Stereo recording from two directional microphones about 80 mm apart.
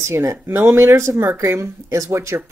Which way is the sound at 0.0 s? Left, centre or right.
Right.